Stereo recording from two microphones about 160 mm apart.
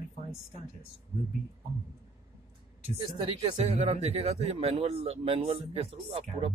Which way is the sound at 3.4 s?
40° right (ahead or behind).